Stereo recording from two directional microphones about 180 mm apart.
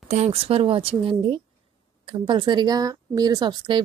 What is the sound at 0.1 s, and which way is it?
Speech, 35° right (ahead or behind).